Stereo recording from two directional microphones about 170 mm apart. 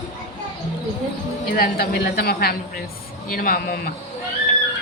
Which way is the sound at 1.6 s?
65° left (ahead or behind).